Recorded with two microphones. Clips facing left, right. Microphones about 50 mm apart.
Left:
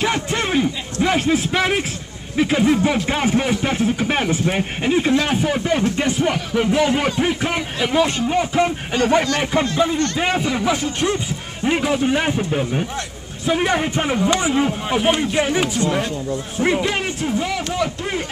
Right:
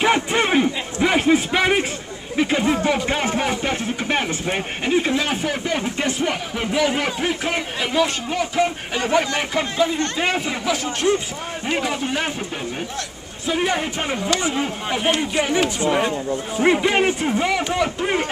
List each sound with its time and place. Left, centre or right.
0.0 s a sound: centre
1.0 s speech: centre
7.2 s a sound: centre
8.5 s speech: centre
9.5 s speech: centre
10.6 s a man's voice: centre
11.6 s a man's voice: centre
15.8 s speech: centre